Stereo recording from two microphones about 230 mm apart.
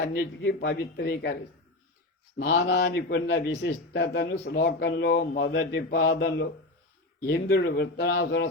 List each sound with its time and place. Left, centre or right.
0.0 s a man's voice: left
2.4 s a man's voice: left